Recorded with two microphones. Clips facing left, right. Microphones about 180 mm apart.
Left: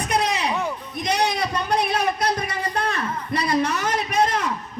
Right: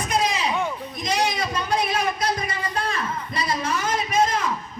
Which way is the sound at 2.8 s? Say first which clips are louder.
Left 1 dB; 65° left (ahead or behind).